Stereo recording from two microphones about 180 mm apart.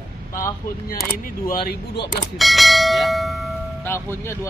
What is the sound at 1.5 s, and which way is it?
Speech, 60° left (ahead or behind).